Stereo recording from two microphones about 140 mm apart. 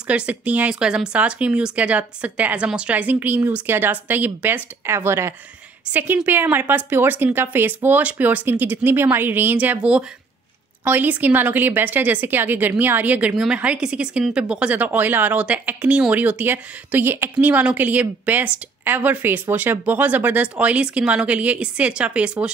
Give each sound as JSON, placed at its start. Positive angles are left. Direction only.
{"t": 0.0, "sound": "a woman's voice", "side_deg": -10}